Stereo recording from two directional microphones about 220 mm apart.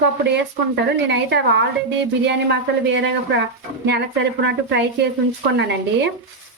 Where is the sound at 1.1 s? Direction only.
50° right (ahead or behind).